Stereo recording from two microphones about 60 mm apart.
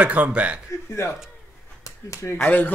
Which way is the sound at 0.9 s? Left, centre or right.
Left.